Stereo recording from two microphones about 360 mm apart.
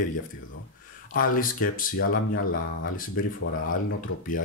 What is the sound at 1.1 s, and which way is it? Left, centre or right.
Speech, left.